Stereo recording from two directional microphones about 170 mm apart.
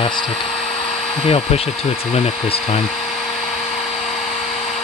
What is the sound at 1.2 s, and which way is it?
Speech, 35° left (ahead or behind).